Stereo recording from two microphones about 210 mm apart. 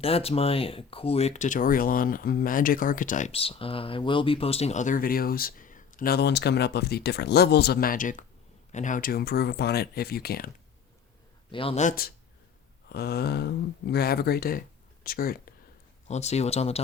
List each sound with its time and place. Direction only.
0.0 s speech: 30° left (ahead or behind); by 10.5 s 45° left (ahead or behind)
11.5 s speech: 30° left (ahead or behind); by 15.5 s 45° left (ahead or behind)
16.0 s speech: 30° left (ahead or behind)